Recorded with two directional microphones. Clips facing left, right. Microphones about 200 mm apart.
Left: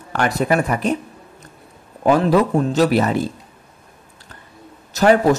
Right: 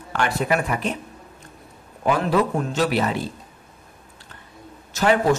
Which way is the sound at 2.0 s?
40° left (ahead or behind).